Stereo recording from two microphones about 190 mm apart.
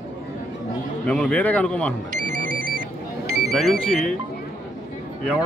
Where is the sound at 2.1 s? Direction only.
45° right (ahead or behind).